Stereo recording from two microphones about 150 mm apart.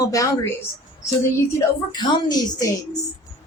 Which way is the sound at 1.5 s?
30° left (ahead or behind).